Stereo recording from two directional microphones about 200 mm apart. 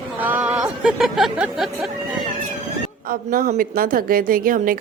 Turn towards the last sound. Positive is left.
turn(degrees=-45)  # may be behind; listen again after turning